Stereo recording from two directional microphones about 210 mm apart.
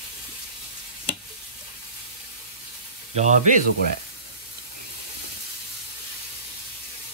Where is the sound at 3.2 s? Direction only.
35° right (ahead or behind).